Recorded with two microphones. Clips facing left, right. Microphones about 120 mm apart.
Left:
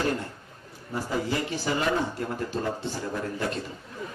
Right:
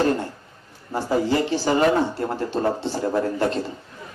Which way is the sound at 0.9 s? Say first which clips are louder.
Right 7 dB; 30° right (ahead or behind).